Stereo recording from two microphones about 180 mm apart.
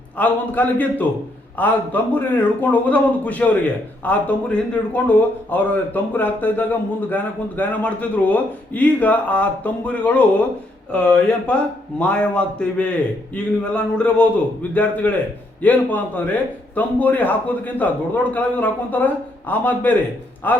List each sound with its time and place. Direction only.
0.2 s speech: 10° left (ahead or behind)